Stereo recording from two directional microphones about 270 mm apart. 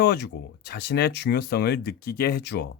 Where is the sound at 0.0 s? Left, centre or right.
Left.